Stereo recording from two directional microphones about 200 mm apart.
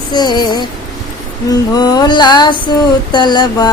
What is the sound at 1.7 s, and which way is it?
Music, 20° left (ahead or behind).